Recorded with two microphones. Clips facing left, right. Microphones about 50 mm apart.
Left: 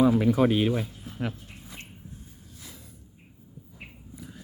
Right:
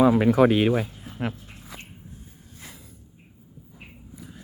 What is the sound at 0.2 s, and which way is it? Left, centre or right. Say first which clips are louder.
Speech: right 4 dB; right.